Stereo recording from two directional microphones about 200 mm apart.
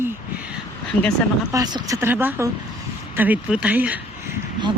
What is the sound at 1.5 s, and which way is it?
Speech, 20° right (ahead or behind).